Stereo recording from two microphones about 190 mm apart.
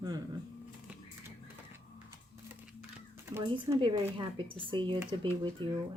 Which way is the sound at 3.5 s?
25° right (ahead or behind).